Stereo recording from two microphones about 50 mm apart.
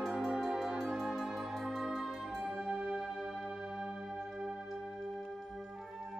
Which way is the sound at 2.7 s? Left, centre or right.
Centre.